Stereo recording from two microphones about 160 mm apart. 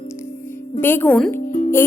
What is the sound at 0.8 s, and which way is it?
Speech, 10° left (ahead or behind).